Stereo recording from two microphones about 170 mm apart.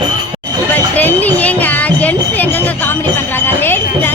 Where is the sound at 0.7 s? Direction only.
10° left (ahead or behind).